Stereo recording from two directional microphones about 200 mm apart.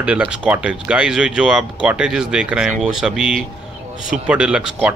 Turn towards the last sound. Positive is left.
turn(degrees=-5)  # may be behind; listen again after turning